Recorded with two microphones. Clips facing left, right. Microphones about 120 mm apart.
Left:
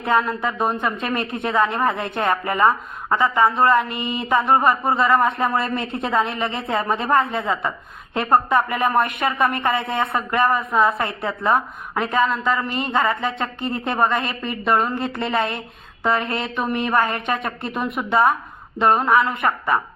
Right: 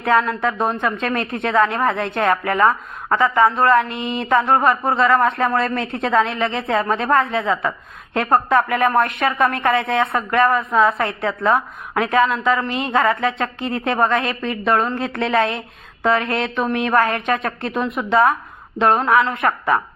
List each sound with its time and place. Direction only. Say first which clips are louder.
0.0 s a woman's voice: right 3 dB; 5° left (ahead or behind)